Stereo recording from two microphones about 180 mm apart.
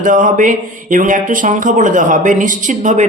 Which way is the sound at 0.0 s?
45° right (ahead or behind).